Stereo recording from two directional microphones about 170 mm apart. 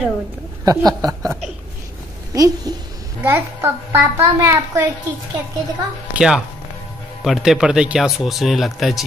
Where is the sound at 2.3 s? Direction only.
20° right (ahead or behind).